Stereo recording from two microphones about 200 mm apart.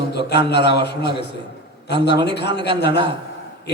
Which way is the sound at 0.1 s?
55° left (ahead or behind).